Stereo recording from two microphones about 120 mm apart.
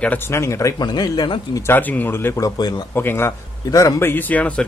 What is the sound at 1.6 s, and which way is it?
Speech, 15° left (ahead or behind).